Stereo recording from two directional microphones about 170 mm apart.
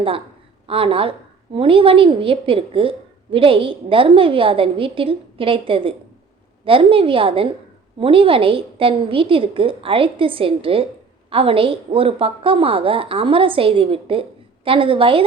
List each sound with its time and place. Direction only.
0.7 s a woman's voice: 30° right (ahead or behind)